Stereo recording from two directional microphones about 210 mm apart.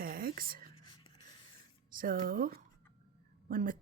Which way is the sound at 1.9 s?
40° right (ahead or behind).